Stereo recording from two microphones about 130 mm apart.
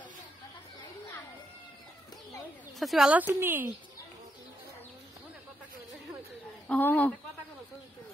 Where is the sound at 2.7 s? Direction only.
Centre (ahead or behind).